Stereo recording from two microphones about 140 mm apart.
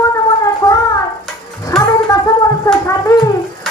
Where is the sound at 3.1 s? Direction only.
25° left (ahead or behind).